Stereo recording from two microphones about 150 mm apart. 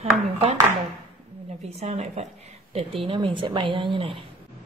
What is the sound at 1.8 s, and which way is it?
A woman's voice, 45° right (ahead or behind).